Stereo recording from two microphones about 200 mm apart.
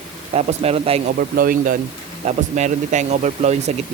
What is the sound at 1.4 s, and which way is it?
Speech, 45° right (ahead or behind).